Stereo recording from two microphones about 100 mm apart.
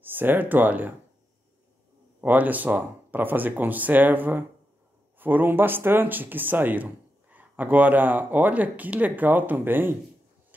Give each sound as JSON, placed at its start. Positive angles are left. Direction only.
{"t": 0.0, "sound": "speech", "side_deg": -20}
{"t": 2.2, "sound": "speech", "side_deg": -15}